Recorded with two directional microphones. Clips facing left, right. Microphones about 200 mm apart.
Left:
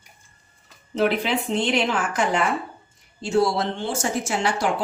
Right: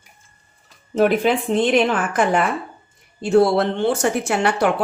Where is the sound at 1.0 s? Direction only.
50° right (ahead or behind).